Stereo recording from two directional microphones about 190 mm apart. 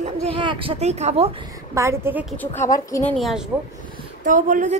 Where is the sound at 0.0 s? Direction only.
25° right (ahead or behind).